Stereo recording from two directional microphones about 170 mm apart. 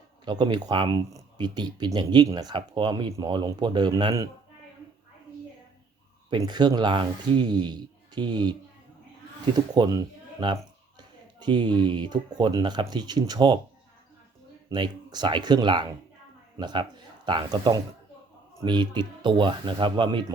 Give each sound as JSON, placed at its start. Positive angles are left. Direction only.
{"t": 0.3, "sound": "speech", "side_deg": -25}
{"t": 6.3, "sound": "speech", "side_deg": -25}
{"t": 14.7, "sound": "speech", "side_deg": -25}